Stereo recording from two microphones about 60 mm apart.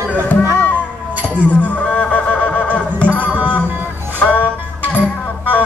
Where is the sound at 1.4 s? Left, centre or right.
Left.